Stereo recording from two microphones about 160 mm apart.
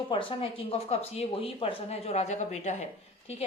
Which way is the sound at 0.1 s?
35° left (ahead or behind).